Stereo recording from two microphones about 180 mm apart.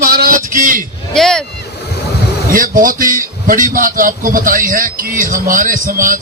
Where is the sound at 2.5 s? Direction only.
50° right (ahead or behind).